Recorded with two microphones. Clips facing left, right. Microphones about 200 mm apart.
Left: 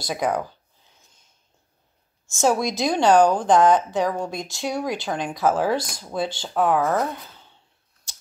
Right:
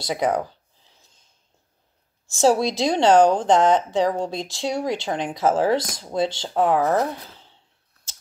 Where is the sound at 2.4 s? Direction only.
30° right (ahead or behind).